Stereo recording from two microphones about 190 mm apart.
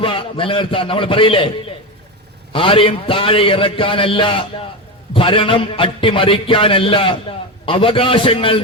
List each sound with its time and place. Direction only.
0.0 s a man's voice: 25° left (ahead or behind)